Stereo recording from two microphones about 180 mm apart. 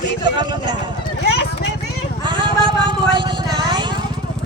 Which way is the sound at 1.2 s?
70° left (ahead or behind).